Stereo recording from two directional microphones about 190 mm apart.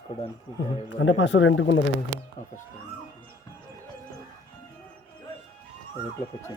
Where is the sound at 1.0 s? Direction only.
75° left (ahead or behind).